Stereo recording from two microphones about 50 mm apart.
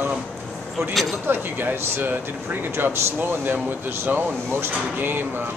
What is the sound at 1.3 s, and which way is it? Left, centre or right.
Speech, right.